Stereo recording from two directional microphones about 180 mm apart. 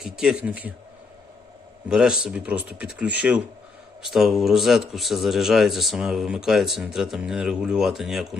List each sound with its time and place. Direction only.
0.0 s speech: 5° right (ahead or behind)
1.9 s speech: 5° right (ahead or behind)